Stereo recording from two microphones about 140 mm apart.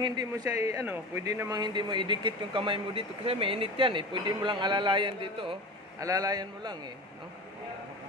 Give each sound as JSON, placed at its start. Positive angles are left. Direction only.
{"t": 0.0, "sound": "speech", "side_deg": -30}
{"t": 5.9, "sound": "a man's voice", "side_deg": -25}